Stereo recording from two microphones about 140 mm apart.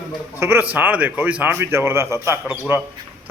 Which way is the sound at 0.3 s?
15° right (ahead or behind).